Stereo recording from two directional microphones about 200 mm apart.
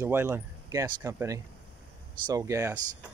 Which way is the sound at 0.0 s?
10° right (ahead or behind).